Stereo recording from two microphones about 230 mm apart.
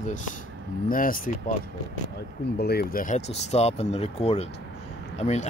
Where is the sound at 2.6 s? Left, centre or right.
Left.